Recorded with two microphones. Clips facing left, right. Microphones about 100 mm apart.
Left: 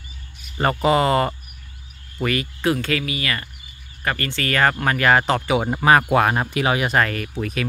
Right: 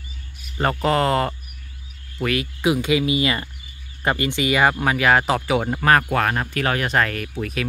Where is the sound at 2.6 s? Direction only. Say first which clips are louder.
Right 3 dB; 15° right (ahead or behind).